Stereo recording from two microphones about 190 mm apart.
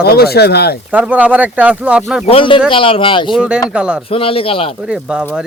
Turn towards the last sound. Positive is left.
turn(degrees=-5)  # may be behind; listen again after turning